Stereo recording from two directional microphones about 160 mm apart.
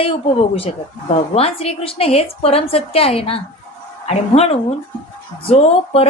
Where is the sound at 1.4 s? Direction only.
40° left (ahead or behind).